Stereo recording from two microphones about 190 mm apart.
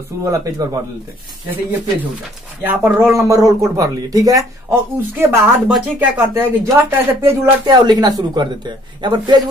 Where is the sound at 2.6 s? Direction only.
10° right (ahead or behind).